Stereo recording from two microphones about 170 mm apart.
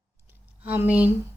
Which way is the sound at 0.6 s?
10° right (ahead or behind).